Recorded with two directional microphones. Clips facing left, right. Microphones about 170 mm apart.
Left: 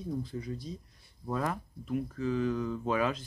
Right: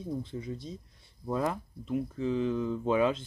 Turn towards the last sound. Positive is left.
turn(degrees=-25)  # may be behind; listen again after turning